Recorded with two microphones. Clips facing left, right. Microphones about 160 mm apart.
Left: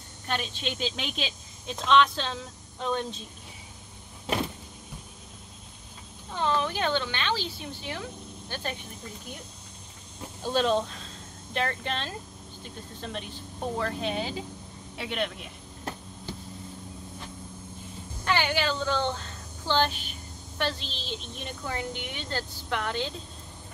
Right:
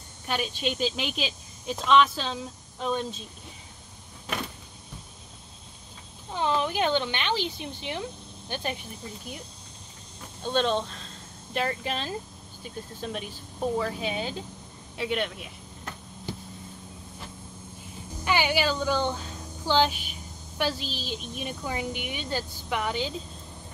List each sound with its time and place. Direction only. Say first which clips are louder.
0.3 s a woman's voice: right 3 dB; 10° right (ahead or behind)
6.3 s speech: right 1 dB; 15° right (ahead or behind)
10.4 s speech: left 1 dB; 5° left (ahead or behind)
18.2 s speech: right 2 dB; 10° right (ahead or behind)